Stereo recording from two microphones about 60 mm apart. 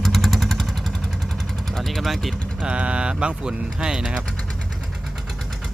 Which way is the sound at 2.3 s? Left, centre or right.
Centre.